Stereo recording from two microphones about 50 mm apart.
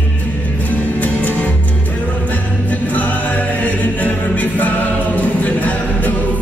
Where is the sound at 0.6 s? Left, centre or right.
Left.